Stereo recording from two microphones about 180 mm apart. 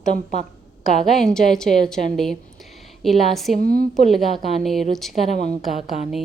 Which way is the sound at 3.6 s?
55° right (ahead or behind).